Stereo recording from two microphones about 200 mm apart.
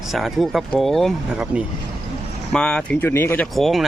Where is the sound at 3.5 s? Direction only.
Centre (ahead or behind).